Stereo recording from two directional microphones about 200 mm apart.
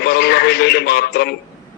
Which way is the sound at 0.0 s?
55° left (ahead or behind).